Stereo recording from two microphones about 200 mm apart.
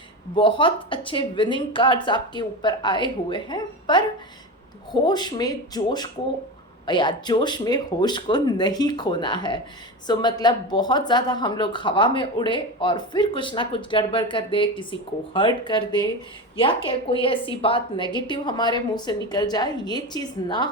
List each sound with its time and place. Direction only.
0.3 s speech: 25° left (ahead or behind)